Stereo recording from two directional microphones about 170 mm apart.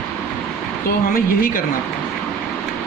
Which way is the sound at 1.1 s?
60° left (ahead or behind).